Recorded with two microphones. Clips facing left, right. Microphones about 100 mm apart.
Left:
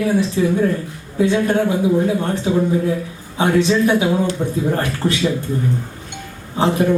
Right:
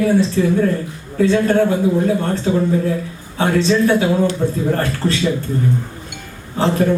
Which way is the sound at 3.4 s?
15° left (ahead or behind).